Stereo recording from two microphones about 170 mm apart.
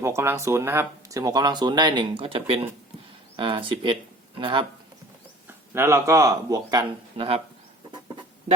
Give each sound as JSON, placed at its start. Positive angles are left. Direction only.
{"t": 0.0, "sound": "speech", "side_deg": -15}
{"t": 5.7, "sound": "speech", "side_deg": -15}